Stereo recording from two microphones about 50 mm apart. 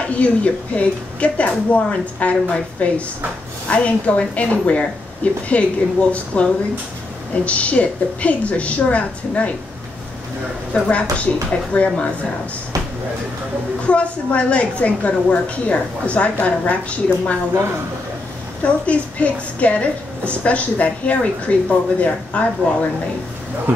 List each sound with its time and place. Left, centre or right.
0.1 s a woman's voice: left
10.7 s a woman's voice: left
13.8 s a woman's voice: left
18.6 s a woman's voice: left